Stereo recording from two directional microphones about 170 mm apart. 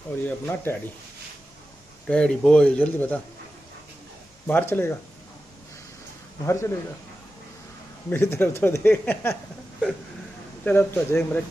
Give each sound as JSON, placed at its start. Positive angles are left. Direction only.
{"t": 0.2, "sound": "speech", "side_deg": 10}
{"t": 2.0, "sound": "speech", "side_deg": 5}
{"t": 4.5, "sound": "speech", "side_deg": 10}
{"t": 6.4, "sound": "speech", "side_deg": 15}
{"t": 8.1, "sound": "speech", "side_deg": 15}
{"t": 10.6, "sound": "speech", "side_deg": 10}